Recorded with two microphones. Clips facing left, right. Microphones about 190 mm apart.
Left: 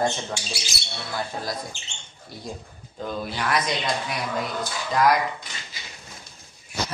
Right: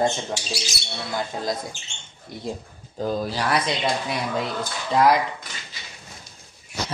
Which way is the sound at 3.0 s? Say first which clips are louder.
Right 4 dB; 35° right (ahead or behind).